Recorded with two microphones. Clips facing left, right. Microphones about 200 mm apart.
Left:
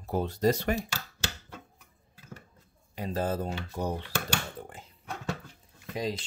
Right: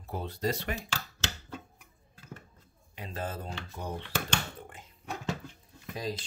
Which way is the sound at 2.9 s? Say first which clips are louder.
Left 7 dB; 40° left (ahead or behind).